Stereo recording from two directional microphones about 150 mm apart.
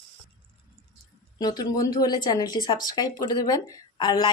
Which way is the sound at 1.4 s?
25° left (ahead or behind).